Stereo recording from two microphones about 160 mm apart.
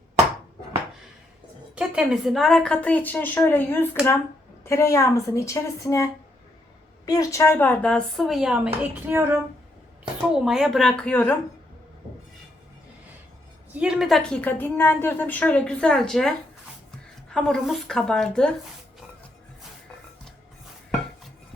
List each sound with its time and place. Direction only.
1.7 s a woman's voice: 5° right (ahead or behind)
13.7 s a woman's voice: 5° right (ahead or behind)
17.3 s a woman's voice: centre (ahead or behind)